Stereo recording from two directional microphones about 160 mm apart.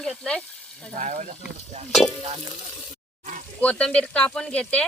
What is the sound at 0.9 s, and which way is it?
Sizzle, 50° right (ahead or behind).